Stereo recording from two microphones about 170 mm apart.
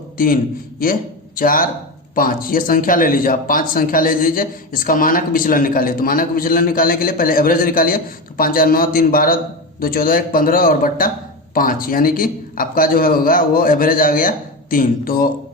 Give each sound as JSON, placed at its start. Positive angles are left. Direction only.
{"t": 1.4, "sound": "a man's voice", "side_deg": 55}